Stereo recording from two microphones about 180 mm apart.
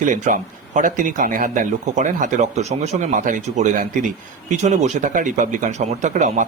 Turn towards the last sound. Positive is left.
turn(degrees=-45)  # may be behind; listen again after turning